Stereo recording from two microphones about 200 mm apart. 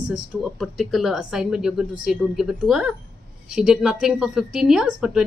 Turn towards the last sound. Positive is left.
turn(degrees=-5)  # may be behind; listen again after turning